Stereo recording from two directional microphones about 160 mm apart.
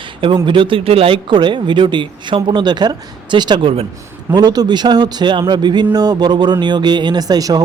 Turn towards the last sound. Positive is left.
turn(degrees=-25)  # may be behind; listen again after turning